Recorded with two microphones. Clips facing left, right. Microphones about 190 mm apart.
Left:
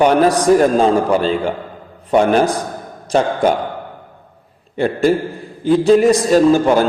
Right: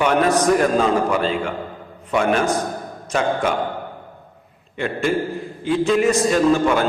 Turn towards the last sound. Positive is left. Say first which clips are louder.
# left 5 dB
turn(degrees=35)  # may be behind; listen again after turning